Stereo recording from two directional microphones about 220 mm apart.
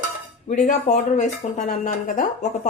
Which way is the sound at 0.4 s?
35° left (ahead or behind).